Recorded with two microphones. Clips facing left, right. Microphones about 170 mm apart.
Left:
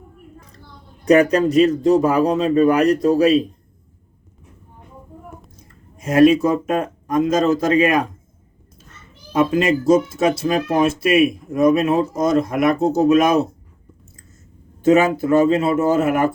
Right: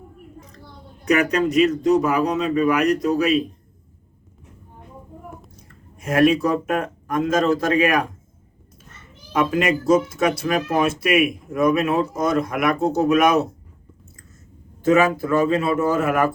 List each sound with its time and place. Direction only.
1.0 s a man's voice: 35° left (ahead or behind)
6.0 s speech: 20° left (ahead or behind)
9.3 s speech: 25° left (ahead or behind)
14.8 s speech: 25° left (ahead or behind)